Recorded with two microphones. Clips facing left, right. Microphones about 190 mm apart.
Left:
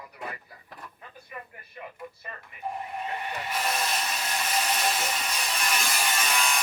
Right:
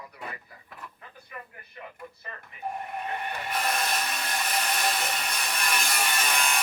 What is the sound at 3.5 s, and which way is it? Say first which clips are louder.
Wood: right 1 dB; 60° right (ahead or behind).